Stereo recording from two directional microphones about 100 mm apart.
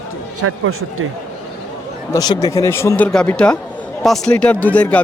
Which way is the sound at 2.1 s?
40° left (ahead or behind).